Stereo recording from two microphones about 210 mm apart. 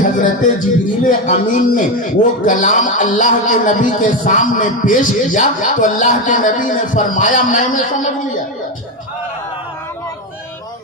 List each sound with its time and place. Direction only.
0.0 s a man's voice: 40° left (ahead or behind)